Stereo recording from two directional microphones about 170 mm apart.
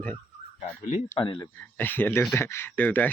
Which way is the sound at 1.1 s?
30° left (ahead or behind).